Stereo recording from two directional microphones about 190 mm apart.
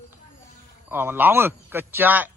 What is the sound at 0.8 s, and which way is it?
A man's voice, 10° right (ahead or behind).